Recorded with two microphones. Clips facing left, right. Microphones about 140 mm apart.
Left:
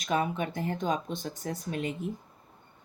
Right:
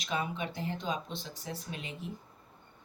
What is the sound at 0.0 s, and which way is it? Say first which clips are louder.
Speech: left 6 dB; 50° left (ahead or behind).